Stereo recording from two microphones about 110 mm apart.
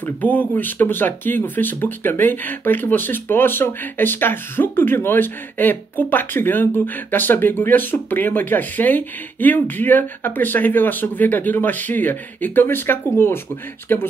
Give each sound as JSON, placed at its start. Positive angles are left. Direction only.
{"t": 0.0, "sound": "speech", "side_deg": 15}